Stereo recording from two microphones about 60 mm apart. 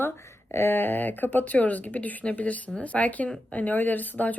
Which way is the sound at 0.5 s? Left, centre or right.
Left.